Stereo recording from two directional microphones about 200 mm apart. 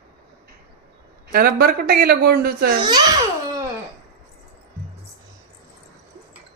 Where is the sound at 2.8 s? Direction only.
20° right (ahead or behind).